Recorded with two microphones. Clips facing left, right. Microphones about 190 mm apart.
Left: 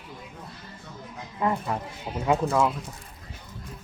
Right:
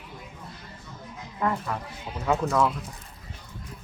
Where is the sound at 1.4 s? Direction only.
20° left (ahead or behind).